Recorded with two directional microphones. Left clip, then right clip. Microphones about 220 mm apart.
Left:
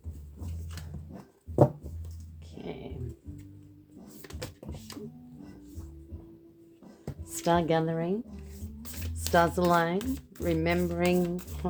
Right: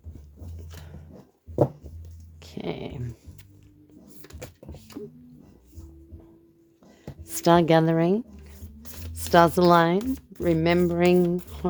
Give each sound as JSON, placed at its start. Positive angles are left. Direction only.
{"t": 2.4, "sound": "music", "side_deg": -50}
{"t": 4.2, "sound": "a sound", "side_deg": 0}
{"t": 7.3, "sound": "speech", "side_deg": -50}
{"t": 9.3, "sound": "speech", "side_deg": -50}